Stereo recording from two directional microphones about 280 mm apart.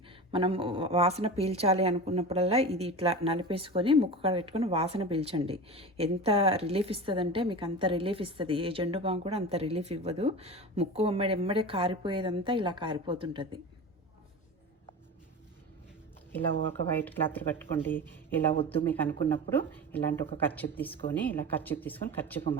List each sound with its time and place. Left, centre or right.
0.3 s a woman's voice: centre
16.9 s a woman's voice: centre